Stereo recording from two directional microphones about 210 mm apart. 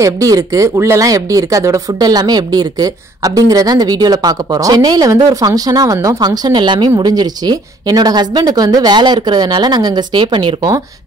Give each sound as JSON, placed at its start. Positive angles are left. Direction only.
{"t": 0.0, "sound": "speech", "side_deg": -15}